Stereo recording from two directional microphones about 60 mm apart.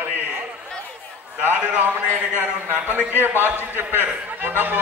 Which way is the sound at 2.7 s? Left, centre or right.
Right.